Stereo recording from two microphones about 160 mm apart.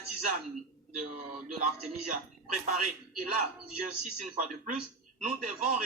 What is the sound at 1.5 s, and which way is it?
Speech, 45° right (ahead or behind).